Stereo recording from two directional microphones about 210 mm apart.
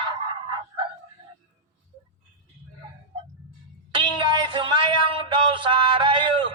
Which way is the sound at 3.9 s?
25° right (ahead or behind).